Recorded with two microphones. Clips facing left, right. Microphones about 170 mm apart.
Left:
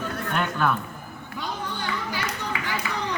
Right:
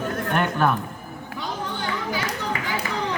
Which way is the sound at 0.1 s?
45° right (ahead or behind).